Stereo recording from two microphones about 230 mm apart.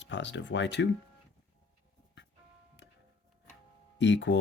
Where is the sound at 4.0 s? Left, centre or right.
Left.